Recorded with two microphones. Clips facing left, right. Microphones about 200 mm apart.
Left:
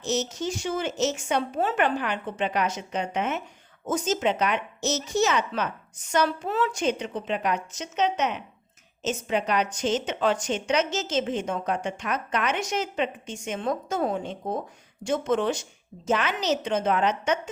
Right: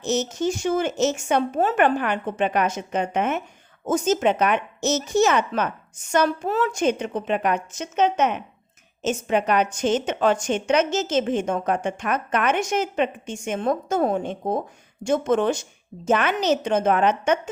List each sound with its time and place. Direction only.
0.0 s speech: 50° right (ahead or behind)